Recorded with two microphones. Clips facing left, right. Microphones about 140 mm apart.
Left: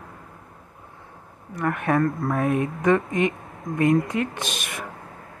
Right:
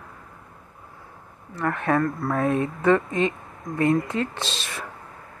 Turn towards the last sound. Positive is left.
turn(degrees=15)  # may be behind; listen again after turning